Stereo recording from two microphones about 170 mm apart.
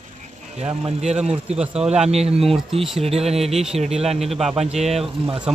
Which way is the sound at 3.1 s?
35° right (ahead or behind).